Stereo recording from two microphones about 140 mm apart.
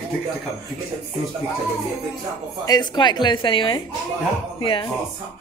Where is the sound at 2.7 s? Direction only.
30° left (ahead or behind).